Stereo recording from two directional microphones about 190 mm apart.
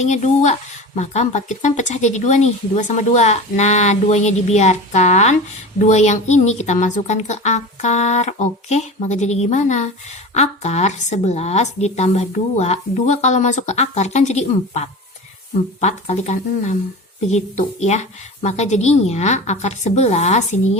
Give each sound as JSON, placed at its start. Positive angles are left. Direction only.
{"t": 0.0, "sound": "a woman's voice", "side_deg": 40}